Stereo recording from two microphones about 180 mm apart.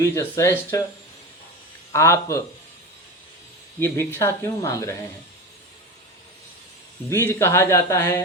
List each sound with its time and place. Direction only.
0.0 s speech: 15° left (ahead or behind)
1.9 s speech: 15° left (ahead or behind)
3.8 s speech: 10° left (ahead or behind)
7.1 s speech: 15° left (ahead or behind)